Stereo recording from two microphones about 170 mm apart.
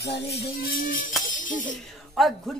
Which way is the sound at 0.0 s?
65° left (ahead or behind).